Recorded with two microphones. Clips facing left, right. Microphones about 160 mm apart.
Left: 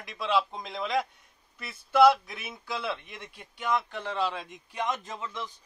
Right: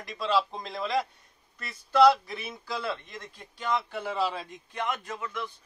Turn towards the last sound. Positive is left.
turn(degrees=25)  # may be behind; listen again after turning